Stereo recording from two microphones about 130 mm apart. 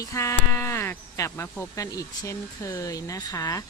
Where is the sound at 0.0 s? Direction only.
25° left (ahead or behind).